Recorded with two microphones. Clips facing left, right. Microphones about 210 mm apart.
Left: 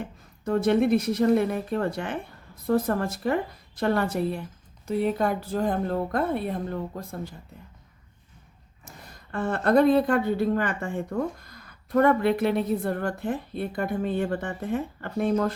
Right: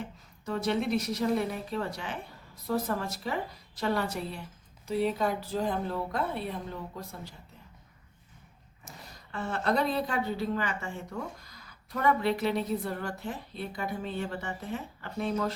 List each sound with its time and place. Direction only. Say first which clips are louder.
0.0 s a woman's voice: left 6 dB; 55° left (ahead or behind)
9.0 s a woman's voice: left 7 dB; 55° left (ahead or behind)